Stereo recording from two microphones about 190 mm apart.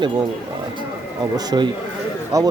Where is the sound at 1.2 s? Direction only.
20° right (ahead or behind).